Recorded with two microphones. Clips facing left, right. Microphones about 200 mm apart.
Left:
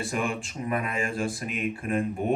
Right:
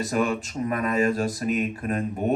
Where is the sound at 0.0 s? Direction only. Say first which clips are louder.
Right 5 dB; 40° right (ahead or behind).